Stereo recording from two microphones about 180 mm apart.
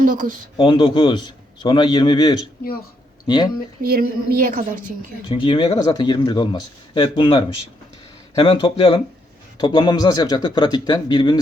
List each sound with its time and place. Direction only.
0.0 s a woman's voice: 45° right (ahead or behind)
0.5 s speech: 30° left (ahead or behind)
3.8 s a woman's voice: 55° right (ahead or behind)
5.3 s speech: 30° left (ahead or behind)